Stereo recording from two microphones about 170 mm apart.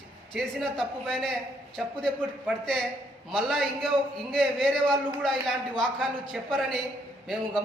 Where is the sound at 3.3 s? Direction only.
Centre (ahead or behind).